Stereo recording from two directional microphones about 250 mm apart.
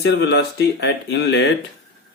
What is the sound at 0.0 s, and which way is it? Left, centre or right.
Speech, left.